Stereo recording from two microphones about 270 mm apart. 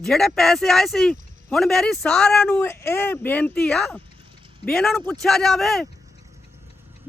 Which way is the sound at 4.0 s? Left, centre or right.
Centre.